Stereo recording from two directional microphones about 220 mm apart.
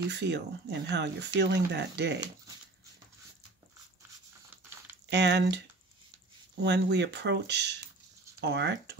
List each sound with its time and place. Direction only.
0.1 s speech: 50° right (ahead or behind)
5.1 s speech: 50° right (ahead or behind)
6.6 s speech: 50° right (ahead or behind)